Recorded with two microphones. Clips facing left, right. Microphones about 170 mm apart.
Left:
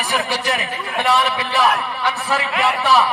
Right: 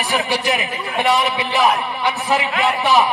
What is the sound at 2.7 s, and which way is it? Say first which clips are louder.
Speech: left 1 dB; centre (ahead or behind).